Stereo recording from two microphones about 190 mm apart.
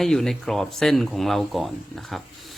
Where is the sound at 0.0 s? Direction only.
Centre (ahead or behind).